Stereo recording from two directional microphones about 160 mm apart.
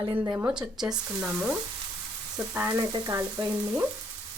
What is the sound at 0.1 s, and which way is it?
Speech, 10° right (ahead or behind).